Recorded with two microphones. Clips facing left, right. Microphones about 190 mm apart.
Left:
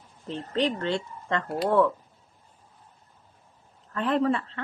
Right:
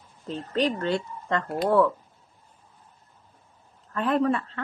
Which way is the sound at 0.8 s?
25° left (ahead or behind).